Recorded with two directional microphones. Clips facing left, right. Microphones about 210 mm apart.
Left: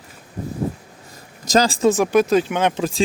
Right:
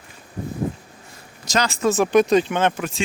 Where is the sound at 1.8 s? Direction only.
10° left (ahead or behind).